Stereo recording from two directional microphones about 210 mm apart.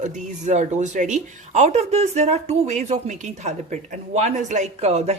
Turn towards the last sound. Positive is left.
turn(degrees=-30)  # may be behind; listen again after turning